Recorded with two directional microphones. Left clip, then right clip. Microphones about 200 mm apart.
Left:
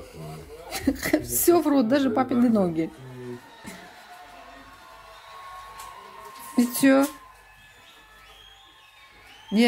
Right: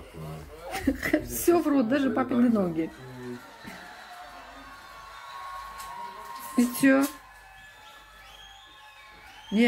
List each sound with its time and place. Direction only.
0.7 s a woman's voice: 15° left (ahead or behind)
6.5 s speech: 15° left (ahead or behind)